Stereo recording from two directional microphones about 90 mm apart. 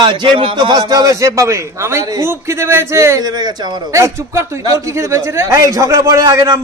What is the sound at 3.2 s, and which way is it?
Speech, 50° right (ahead or behind).